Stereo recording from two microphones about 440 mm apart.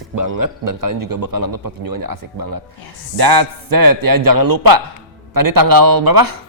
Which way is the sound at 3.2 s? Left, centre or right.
Right.